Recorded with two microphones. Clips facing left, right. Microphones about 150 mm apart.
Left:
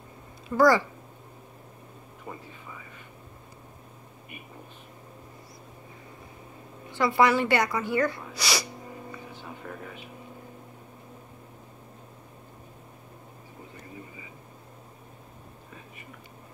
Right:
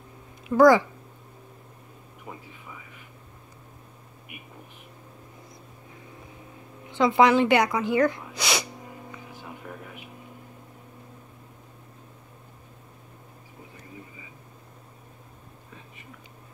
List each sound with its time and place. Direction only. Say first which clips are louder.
0.6 s a woman's voice: right 4 dB; 15° right (ahead or behind)
6.9 s a woman's voice: right 3 dB; 20° right (ahead or behind)
9.1 s music: even; 10° right (ahead or behind)